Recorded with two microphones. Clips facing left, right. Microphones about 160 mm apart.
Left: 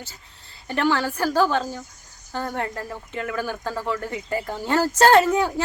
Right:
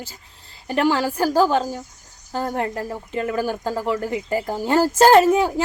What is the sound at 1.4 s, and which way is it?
Speech, 40° right (ahead or behind).